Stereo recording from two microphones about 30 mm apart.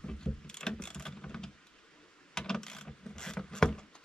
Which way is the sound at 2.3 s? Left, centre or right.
Left.